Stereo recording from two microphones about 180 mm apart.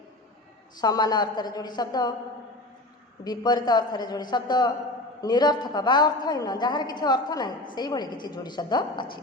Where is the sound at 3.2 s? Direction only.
20° left (ahead or behind).